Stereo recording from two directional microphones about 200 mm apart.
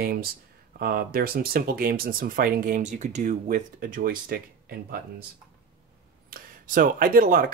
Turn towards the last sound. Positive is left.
turn(degrees=-45)  # may be behind; listen again after turning